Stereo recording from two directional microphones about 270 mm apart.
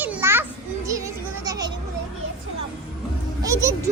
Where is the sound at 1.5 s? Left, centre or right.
Centre.